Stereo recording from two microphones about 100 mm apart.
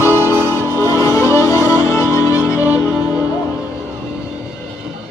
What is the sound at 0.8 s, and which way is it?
Music, 30° left (ahead or behind).